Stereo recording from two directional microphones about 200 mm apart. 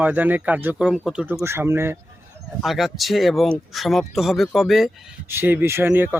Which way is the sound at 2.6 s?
Centre (ahead or behind).